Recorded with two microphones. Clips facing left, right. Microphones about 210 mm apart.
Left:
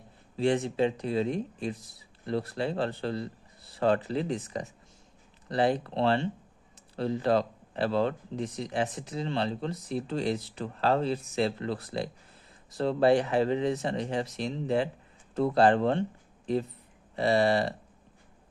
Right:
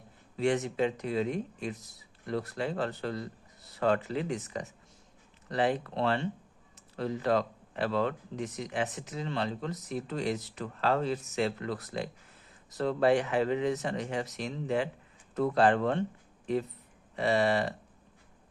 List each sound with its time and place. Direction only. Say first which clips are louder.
0.3 s speech: left 2 dB; 30° left (ahead or behind)
17.2 s speech: left 3 dB; 35° left (ahead or behind)